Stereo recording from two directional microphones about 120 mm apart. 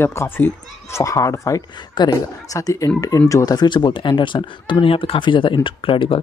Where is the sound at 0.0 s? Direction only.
20° left (ahead or behind).